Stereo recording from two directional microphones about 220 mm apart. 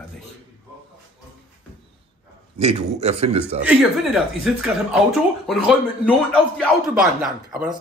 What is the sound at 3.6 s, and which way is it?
Speech, 5° right (ahead or behind).